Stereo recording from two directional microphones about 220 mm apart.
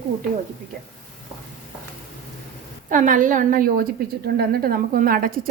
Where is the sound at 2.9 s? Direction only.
35° right (ahead or behind).